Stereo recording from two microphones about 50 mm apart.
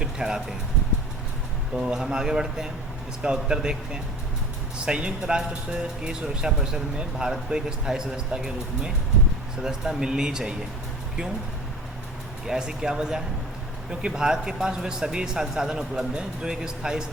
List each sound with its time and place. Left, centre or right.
0.0 s a sound: centre
1.7 s a man's voice: centre
12.5 s a man's voice: centre